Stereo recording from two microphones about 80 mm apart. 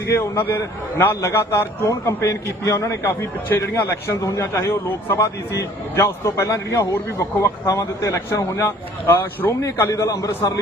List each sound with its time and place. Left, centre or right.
0.1 s a man's voice: left
1.9 s a man's voice: left